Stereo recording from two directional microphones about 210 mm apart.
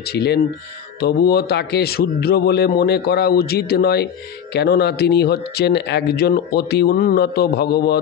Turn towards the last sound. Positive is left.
turn(degrees=50)  # may be behind; listen again after turning